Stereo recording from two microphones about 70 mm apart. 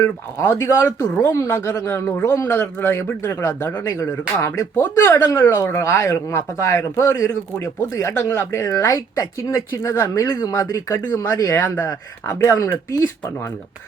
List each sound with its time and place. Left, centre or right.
0.0 s speech: left
3.8 s speech: left
4.7 s speech: left
5.1 s speech: left
8.7 s speech: left
11.6 s speech: left
12.4 s speech: left